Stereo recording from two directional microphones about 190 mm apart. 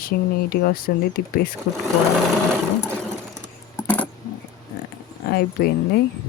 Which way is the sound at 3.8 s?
10° left (ahead or behind).